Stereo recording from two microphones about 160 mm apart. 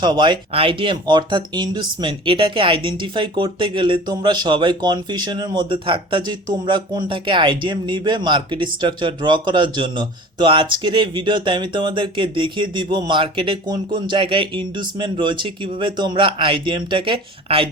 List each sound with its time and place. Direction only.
0.0 s speech: 30° right (ahead or behind)